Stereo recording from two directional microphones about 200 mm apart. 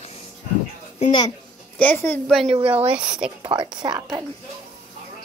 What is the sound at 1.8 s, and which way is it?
A woman's voice, 10° left (ahead or behind).